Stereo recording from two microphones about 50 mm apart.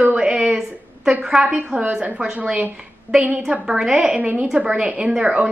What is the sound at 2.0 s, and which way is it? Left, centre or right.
A woman's voice, right.